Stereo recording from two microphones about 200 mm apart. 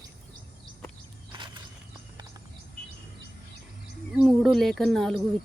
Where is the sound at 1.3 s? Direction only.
25° right (ahead or behind).